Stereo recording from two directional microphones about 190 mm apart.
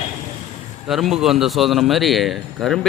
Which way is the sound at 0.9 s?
Centre (ahead or behind).